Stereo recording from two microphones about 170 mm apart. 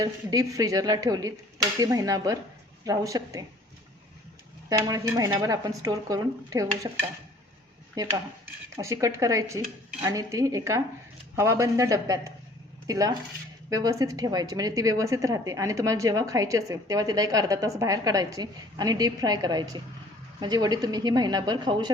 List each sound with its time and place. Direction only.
0.0 s a woman's voice: 20° right (ahead or behind)
4.7 s a woman's voice: 20° right (ahead or behind)
8.0 s a woman's voice: 20° right (ahead or behind)